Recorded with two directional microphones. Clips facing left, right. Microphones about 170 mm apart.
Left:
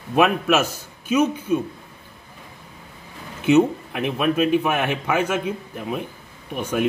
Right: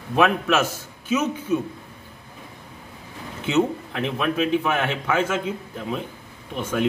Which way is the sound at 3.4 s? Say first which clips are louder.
Left 5 dB; 15° left (ahead or behind).